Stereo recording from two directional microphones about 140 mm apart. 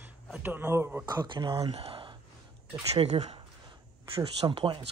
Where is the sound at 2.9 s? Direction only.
50° right (ahead or behind).